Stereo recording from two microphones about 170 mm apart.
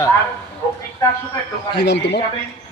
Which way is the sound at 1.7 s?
85° left.